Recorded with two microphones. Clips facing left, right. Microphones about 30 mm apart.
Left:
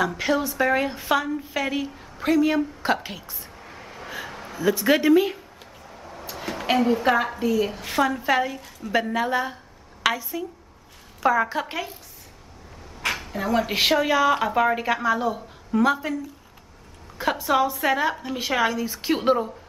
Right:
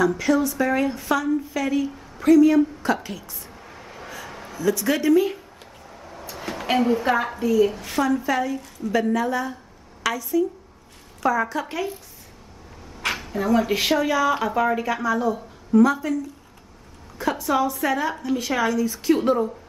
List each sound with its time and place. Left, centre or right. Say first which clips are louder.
0.0 s a woman's voice: right 3 dB; left
3.5 s vehicle: even; centre
4.3 s a sound: even; centre
4.6 s a woman's voice: left 2 dB; left
5.9 s a sound: even; centre
6.2 s a woman's voice: left 1 dB; centre; by 11.6 s left
13.0 s a woman's voice: right 2 dB; centre; by 16.2 s left
17.2 s a woman's voice: even; centre